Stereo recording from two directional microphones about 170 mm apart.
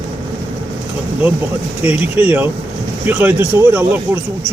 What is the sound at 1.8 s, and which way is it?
Speech, 10° right (ahead or behind).